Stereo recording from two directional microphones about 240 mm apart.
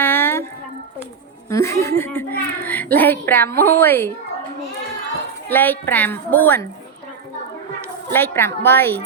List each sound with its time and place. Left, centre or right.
0.0 s a sound: centre
1.5 s a child's voice: centre
5.5 s a child's voice: centre
8.1 s a child's voice: centre